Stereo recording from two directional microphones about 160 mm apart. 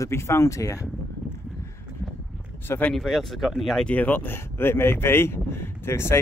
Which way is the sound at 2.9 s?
Centre (ahead or behind).